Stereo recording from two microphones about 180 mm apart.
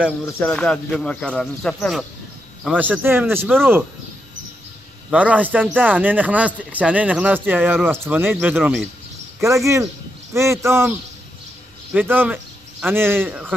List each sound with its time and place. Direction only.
0.4 s speech: 5° left (ahead or behind); by 3.4 s 10° right (ahead or behind)
5.1 s speech: 10° right (ahead or behind)